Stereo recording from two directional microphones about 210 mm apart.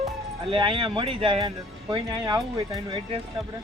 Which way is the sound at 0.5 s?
25° right (ahead or behind).